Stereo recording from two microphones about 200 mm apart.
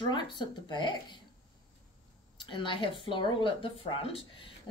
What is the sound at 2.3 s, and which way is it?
Speech, 25° left (ahead or behind).